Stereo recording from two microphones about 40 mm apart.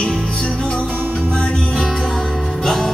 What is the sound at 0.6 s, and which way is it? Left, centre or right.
Music, left.